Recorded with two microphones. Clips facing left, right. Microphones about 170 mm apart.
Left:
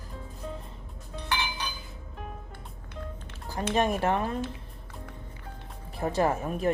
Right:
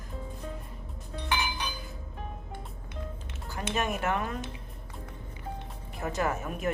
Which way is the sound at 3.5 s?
35° left (ahead or behind).